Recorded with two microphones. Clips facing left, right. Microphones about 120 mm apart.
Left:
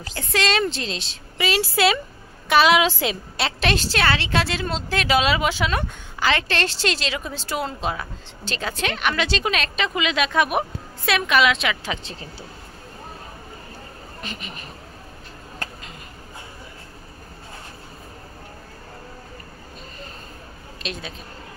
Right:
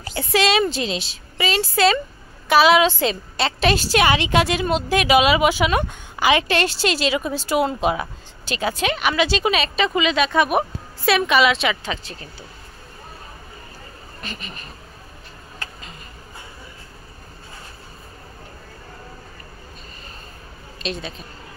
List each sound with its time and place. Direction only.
0.0 s a woman's voice: 10° right (ahead or behind)
1.5 s a woman's voice: 5° left (ahead or behind)
12.0 s speech: 25° left (ahead or behind)
14.2 s speech: 15° left (ahead or behind)
20.8 s a woman's voice: 5° left (ahead or behind)